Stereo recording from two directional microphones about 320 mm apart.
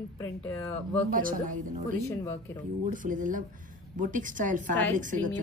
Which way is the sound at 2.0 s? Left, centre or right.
Centre.